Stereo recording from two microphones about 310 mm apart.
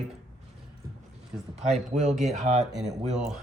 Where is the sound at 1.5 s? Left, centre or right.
Right.